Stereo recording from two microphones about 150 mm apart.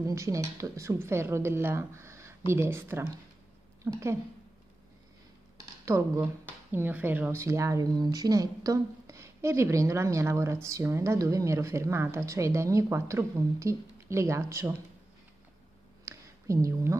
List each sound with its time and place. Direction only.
0.0 s a woman's voice: 20° right (ahead or behind)
5.9 s speech: 20° right (ahead or behind)
16.1 s a sound: 20° right (ahead or behind)